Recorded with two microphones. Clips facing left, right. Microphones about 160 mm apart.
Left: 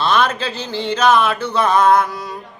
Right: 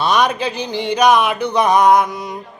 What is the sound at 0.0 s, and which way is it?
Speech, 15° right (ahead or behind).